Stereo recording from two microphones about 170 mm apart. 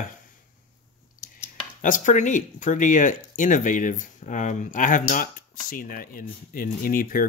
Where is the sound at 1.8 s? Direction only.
50° left (ahead or behind).